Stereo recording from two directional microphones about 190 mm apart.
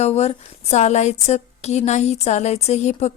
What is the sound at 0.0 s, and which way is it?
A woman's voice, 35° left (ahead or behind).